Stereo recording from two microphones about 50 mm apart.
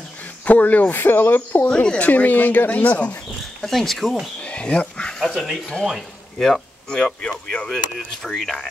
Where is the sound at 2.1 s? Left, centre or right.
Left.